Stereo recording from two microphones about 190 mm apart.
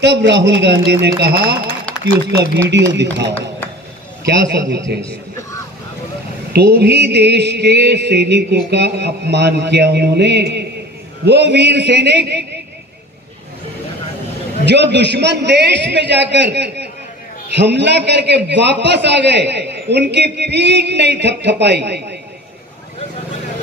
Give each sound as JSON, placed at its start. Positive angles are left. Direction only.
{"t": 0.0, "sound": "a man's voice", "side_deg": -65}
{"t": 2.7, "sound": "a man's voice", "side_deg": -65}
{"t": 6.5, "sound": "a man's voice", "side_deg": -60}
{"t": 14.6, "sound": "a man's voice", "side_deg": -65}